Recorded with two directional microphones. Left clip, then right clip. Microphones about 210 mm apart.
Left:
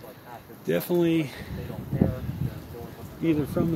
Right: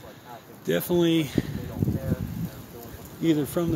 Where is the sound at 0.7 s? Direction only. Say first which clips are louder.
Right 1 dB; 10° right (ahead or behind).